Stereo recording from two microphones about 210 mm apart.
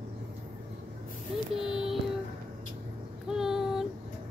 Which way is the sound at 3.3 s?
Centre (ahead or behind).